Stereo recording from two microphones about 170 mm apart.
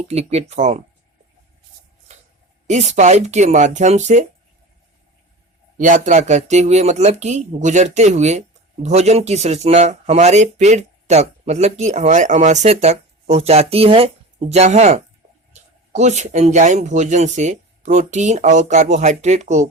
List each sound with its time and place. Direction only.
0.1 s speech: 40° right (ahead or behind)
2.1 s a sound: 40° right (ahead or behind)
2.6 s speech: 40° right (ahead or behind)
5.7 s speech: 50° right (ahead or behind)